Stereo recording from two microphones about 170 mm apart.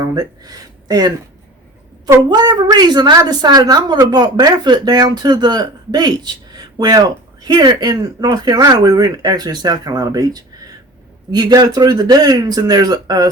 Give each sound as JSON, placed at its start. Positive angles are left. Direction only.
{"t": 0.1, "sound": "a woman's voice", "side_deg": -20}